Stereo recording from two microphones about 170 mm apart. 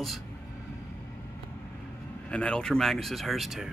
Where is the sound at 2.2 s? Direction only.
5° left (ahead or behind).